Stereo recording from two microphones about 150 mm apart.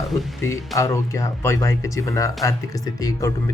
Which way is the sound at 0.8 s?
20° left (ahead or behind).